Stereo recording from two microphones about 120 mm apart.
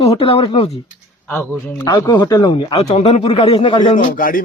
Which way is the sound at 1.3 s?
15° left (ahead or behind).